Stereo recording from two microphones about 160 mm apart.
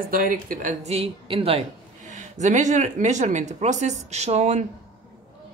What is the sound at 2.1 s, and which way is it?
Speech, 50° right (ahead or behind).